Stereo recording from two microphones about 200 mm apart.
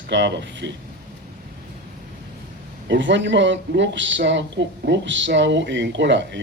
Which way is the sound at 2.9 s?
65° right (ahead or behind).